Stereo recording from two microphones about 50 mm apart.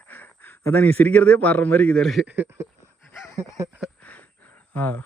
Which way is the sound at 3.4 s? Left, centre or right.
Right.